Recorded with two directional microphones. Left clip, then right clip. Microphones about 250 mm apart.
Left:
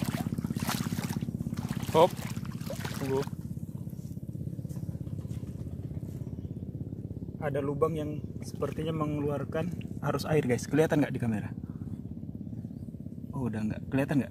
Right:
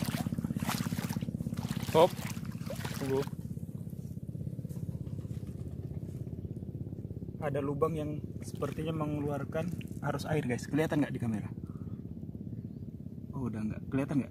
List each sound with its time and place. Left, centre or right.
0.0 s boat: centre
0.6 s boat: centre
7.4 s speech: centre
8.5 s speech: centre
13.4 s speech: left